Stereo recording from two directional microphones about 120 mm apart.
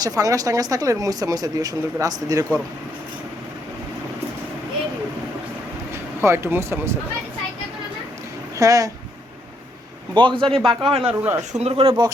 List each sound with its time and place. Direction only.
0.0 s speech: 30° right (ahead or behind)
5.9 s speech: 20° right (ahead or behind)
8.5 s speech: 30° right (ahead or behind)
10.2 s speech: 40° right (ahead or behind)
10.6 s a man's voice: centre (ahead or behind)
11.0 s speech: 15° right (ahead or behind)
11.6 s speech: 50° right (ahead or behind)